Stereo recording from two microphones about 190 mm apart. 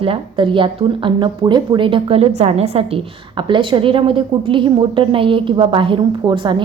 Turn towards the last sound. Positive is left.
turn(degrees=-25)  # may be behind; listen again after turning